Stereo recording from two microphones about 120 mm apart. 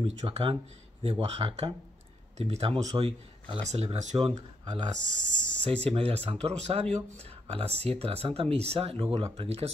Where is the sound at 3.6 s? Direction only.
65° right (ahead or behind).